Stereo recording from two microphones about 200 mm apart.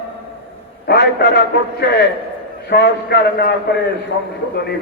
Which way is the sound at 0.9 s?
55° left (ahead or behind).